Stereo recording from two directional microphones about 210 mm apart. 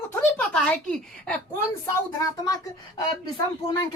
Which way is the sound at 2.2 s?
15° left (ahead or behind).